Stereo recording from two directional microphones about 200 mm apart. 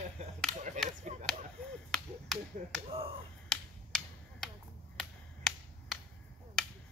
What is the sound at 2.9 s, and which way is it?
Speech, 30° right (ahead or behind).